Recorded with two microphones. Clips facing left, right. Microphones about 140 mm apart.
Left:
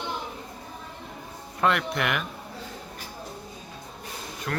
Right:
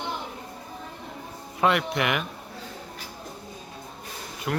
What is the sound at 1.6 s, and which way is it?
Speech, centre (ahead or behind).